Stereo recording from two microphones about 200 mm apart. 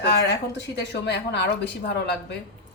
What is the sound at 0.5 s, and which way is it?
Speech, 60° left (ahead or behind).